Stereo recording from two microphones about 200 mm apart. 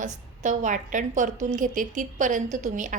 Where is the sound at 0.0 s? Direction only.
40° right (ahead or behind).